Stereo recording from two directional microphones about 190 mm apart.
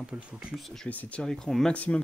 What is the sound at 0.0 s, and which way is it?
Speech, 5° right (ahead or behind).